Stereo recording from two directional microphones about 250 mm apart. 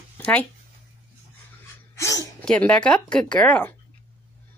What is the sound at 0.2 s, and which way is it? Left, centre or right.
Speech, centre.